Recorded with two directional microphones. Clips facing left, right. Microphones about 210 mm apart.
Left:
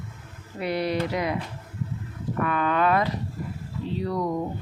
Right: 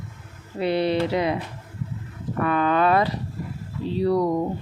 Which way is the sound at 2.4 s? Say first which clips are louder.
Right 3 dB; 30° right (ahead or behind).